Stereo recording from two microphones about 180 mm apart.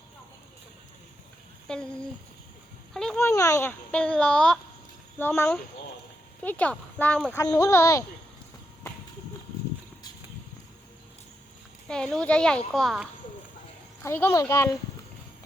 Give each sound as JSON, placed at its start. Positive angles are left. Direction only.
{"t": 1.7, "sound": "a child's voice", "side_deg": 5}
{"t": 2.9, "sound": "speech", "side_deg": 5}
{"t": 3.2, "sound": "speech", "side_deg": 15}
{"t": 11.9, "sound": "a child's voice", "side_deg": 5}
{"t": 14.0, "sound": "speech", "side_deg": 15}